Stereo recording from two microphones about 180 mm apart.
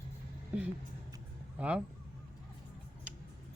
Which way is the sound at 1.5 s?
5° right (ahead or behind).